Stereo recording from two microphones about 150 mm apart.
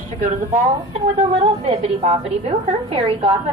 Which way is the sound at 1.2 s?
40° right (ahead or behind).